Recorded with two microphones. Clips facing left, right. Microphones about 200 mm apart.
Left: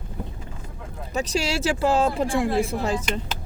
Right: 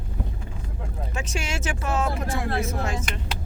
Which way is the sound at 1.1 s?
35° left (ahead or behind).